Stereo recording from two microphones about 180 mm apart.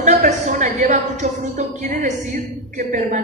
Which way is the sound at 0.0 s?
40° right (ahead or behind).